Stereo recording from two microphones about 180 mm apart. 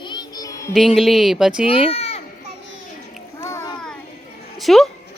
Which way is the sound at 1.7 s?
30° left (ahead or behind).